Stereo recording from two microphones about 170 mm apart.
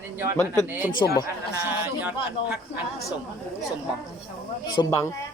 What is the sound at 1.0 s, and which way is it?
Speech, 65° left (ahead or behind).